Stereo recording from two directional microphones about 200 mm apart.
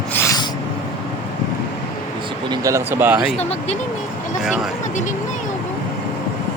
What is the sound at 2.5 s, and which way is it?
Speech, 15° right (ahead or behind).